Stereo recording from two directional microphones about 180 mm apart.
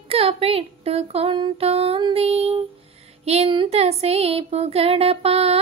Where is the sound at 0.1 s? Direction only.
35° right (ahead or behind).